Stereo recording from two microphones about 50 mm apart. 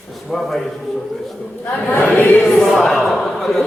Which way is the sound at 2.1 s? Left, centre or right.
Left.